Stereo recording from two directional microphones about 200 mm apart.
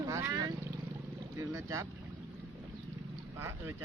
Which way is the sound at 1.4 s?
15° right (ahead or behind).